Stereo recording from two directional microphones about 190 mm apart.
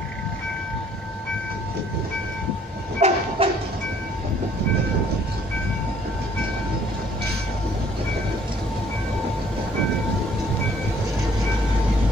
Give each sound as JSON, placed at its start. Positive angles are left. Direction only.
{"t": 3.0, "sound": "train", "side_deg": -35}